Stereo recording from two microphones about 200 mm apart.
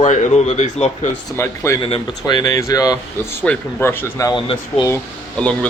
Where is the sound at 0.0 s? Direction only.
35° left (ahead or behind).